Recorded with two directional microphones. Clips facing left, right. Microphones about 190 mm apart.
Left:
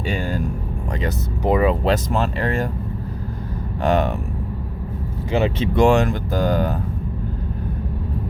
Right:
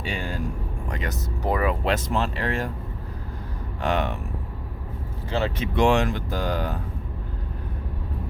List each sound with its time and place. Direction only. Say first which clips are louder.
0.0 s vehicle: left 6 dB; 45° left (ahead or behind)
1.5 s speech: left 6 dB; 20° left (ahead or behind)
1.8 s speech: left 5 dB; 40° left (ahead or behind)
3.8 s speech: left 6 dB; 45° left (ahead or behind)
5.3 s speech: left 6 dB; 15° left (ahead or behind)
5.7 s speech: left 4 dB; 45° left (ahead or behind)